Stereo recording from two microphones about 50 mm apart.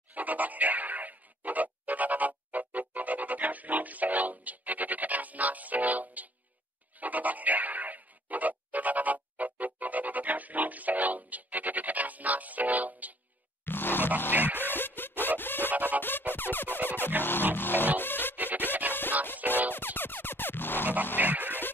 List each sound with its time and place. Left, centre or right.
0.1 s music: right
7.0 s a sound: right
13.7 s grunt: left
14.3 s music: right
14.6 s music: left
15.7 s music: right
16.0 s music: left
18.3 s music: right
19.2 s music: left
21.2 s music: right
21.5 s music: left